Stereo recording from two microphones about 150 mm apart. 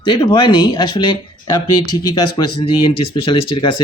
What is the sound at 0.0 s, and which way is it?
Speech, 35° left (ahead or behind).